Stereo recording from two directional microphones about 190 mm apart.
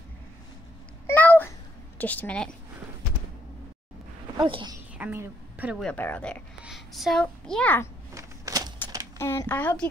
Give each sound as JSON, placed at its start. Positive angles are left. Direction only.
{"t": 1.0, "sound": "babbling", "side_deg": 10}
{"t": 2.0, "sound": "speech", "side_deg": 10}
{"t": 4.4, "sound": "speech", "side_deg": -25}
{"t": 4.9, "sound": "a sound", "side_deg": -10}
{"t": 5.8, "sound": "a child's voice", "side_deg": 5}
{"t": 8.1, "sound": "a sound", "side_deg": -15}
{"t": 9.2, "sound": "speech", "side_deg": 15}